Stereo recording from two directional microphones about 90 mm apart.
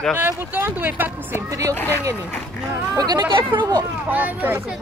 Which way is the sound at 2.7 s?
40° right (ahead or behind).